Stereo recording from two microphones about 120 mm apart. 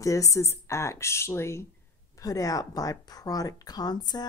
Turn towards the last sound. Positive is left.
turn(degrees=35)  # may be behind; listen again after turning